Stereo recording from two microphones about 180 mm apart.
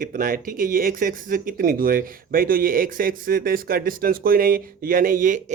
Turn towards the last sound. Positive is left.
turn(degrees=-45)  # may be behind; listen again after turning